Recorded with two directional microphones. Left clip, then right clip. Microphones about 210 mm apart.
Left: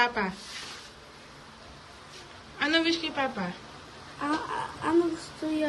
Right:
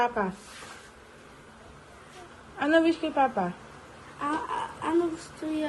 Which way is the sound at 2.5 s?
10° right (ahead or behind).